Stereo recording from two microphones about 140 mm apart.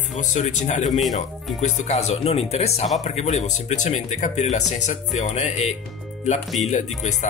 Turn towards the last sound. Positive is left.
turn(degrees=60)  # may be behind; listen again after turning